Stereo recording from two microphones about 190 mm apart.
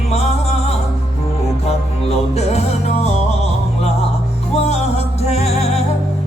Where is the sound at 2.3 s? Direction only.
35° left (ahead or behind).